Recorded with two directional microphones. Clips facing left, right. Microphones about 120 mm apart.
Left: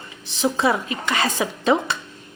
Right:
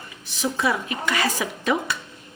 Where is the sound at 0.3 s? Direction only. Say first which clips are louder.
Left 4 dB; 25° left (ahead or behind).